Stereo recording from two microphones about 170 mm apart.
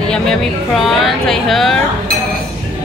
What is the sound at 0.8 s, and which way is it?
Speech, centre (ahead or behind).